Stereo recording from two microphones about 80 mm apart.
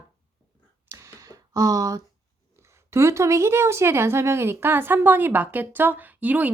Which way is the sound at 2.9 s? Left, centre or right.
Right.